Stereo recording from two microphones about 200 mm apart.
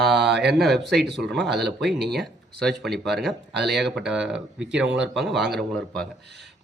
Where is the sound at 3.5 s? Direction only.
55° right (ahead or behind).